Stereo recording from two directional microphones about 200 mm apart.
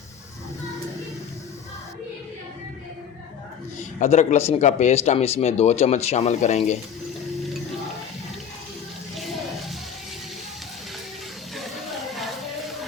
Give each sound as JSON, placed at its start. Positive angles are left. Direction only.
{"t": 4.0, "sound": "speech", "side_deg": 35}
{"t": 9.1, "sound": "a sound", "side_deg": 0}
{"t": 12.1, "sound": "music", "side_deg": 0}